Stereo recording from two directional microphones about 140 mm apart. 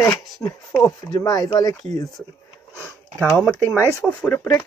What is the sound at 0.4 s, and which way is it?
Speech, 20° left (ahead or behind).